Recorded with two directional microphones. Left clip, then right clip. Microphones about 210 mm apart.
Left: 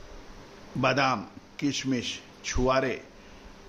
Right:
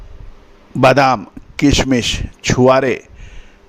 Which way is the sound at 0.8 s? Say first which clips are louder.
Right 14 dB; 55° right (ahead or behind).